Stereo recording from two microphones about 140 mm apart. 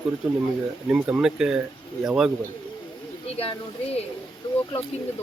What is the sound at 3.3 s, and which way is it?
Speech, 45° left (ahead or behind).